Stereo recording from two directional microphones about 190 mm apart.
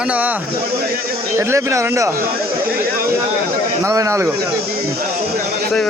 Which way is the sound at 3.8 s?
15° right (ahead or behind).